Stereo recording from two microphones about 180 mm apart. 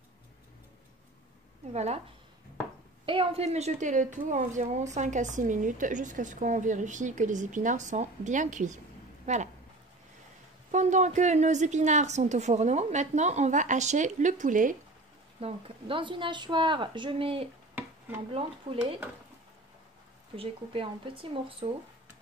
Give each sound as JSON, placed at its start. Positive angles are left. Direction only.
{"t": 1.7, "sound": "a woman's voice", "side_deg": -40}
{"t": 3.1, "sound": "a woman's voice", "side_deg": -30}
{"t": 10.7, "sound": "a woman's voice", "side_deg": -40}
{"t": 15.4, "sound": "a woman's voice", "side_deg": -30}
{"t": 18.7, "sound": "a woman's voice", "side_deg": -30}
{"t": 20.3, "sound": "a woman's voice", "side_deg": -30}